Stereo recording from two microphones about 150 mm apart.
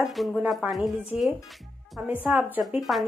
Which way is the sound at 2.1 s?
10° right (ahead or behind).